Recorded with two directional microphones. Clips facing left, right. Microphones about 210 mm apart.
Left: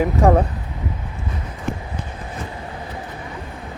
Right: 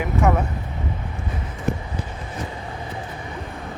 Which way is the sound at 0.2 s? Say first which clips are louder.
Left 4 dB; 35° left (ahead or behind).